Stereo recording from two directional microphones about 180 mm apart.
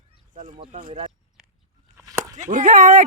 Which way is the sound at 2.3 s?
45° right (ahead or behind).